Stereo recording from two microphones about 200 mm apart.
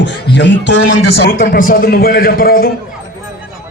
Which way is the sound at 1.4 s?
45° left (ahead or behind).